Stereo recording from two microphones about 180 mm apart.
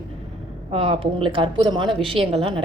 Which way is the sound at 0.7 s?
30° right (ahead or behind).